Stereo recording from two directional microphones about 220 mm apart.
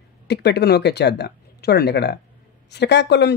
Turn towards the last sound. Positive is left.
turn(degrees=50)  # may be behind; listen again after turning